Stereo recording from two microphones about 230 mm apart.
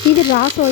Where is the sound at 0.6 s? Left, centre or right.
Left.